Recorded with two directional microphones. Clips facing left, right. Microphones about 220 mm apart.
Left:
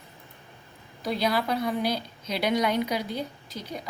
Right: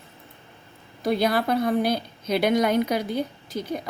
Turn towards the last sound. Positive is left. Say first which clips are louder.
# right 8 dB
turn(degrees=-50)  # may be behind; listen again after turning